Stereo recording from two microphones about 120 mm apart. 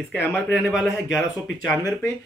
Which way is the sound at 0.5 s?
5° right (ahead or behind).